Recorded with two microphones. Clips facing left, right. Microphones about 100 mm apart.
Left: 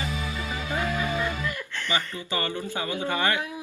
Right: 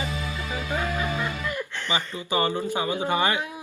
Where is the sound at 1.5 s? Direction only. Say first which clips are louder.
Right 2 dB; 20° right (ahead or behind).